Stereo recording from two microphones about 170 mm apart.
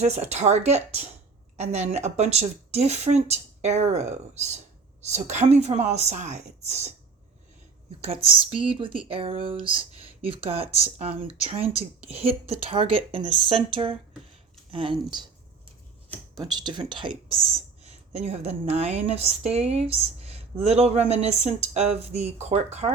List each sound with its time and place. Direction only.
0.0 s speech: 40° right (ahead or behind)
8.0 s speech: 35° right (ahead or behind)
14.7 s speech: 30° right (ahead or behind)
16.3 s speech: 25° right (ahead or behind); by 22.9 s 40° right (ahead or behind)